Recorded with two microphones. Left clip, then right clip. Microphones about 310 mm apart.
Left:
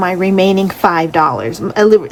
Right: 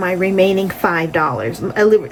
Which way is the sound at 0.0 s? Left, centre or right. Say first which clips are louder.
Left 2 dB; centre.